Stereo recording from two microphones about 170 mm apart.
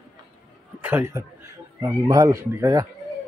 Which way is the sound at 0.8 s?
15° right (ahead or behind).